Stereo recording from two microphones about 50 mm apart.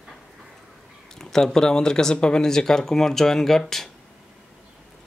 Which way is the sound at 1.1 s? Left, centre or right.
Centre.